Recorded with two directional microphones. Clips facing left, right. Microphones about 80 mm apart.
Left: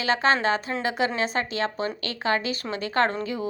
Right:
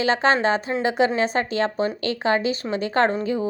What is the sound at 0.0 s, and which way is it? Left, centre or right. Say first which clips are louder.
A woman's voice: right 3 dB; right.